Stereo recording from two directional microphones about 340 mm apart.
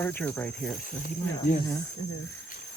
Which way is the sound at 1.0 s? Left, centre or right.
Left.